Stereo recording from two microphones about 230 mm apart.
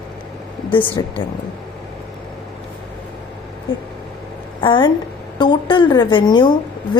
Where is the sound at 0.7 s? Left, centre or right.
Left.